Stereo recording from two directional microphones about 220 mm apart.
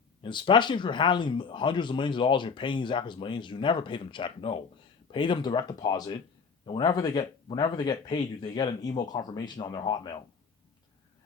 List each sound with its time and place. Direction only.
0.2 s speech: 20° left (ahead or behind)